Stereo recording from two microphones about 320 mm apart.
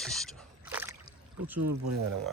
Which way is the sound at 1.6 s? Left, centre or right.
Right.